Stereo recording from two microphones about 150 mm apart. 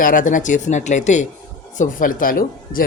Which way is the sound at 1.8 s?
65° left (ahead or behind).